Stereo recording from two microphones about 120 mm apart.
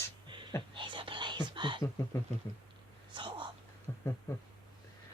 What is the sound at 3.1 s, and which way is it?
Whispering, 40° right (ahead or behind).